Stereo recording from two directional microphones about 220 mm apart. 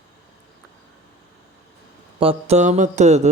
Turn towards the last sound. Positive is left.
turn(degrees=-30)  # may be behind; listen again after turning